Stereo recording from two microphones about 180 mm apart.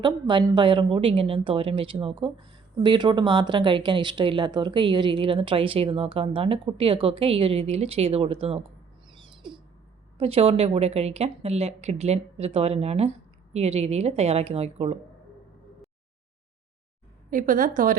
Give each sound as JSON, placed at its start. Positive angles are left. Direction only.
{"t": 0.0, "sound": "a woman's voice", "side_deg": -25}
{"t": 9.0, "sound": "a sound", "side_deg": -25}
{"t": 10.2, "sound": "speech", "side_deg": -35}
{"t": 17.3, "sound": "a woman's voice", "side_deg": -50}